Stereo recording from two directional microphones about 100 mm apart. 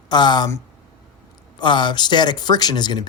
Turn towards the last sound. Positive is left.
turn(degrees=45)  # may be behind; listen again after turning